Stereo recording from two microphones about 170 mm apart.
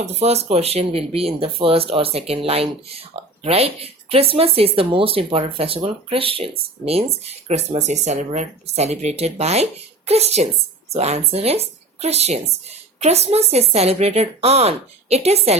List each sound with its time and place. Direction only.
0.0 s speech: 40° right (ahead or behind)